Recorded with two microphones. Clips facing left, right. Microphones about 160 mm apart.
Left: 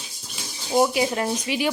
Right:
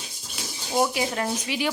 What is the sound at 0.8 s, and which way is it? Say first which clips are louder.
Speech: left 3 dB; 20° left (ahead or behind).